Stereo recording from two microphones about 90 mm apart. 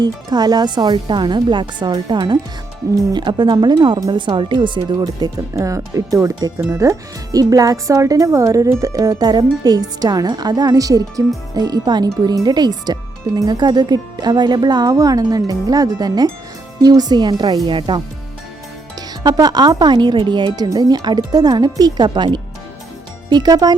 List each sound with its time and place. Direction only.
0.0 s speech: 50° right (ahead or behind)
19.2 s speech: 45° right (ahead or behind)
20.6 s speech: 45° right (ahead or behind)